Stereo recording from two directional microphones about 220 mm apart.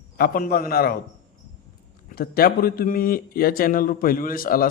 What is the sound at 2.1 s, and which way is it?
Speech, 45° left (ahead or behind).